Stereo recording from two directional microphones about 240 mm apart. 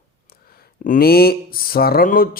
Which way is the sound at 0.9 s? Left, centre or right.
Left.